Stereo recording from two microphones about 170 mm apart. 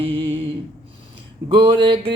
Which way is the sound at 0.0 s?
35° right (ahead or behind).